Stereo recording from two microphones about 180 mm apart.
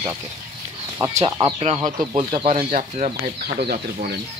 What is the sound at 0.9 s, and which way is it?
Speech, 20° right (ahead or behind).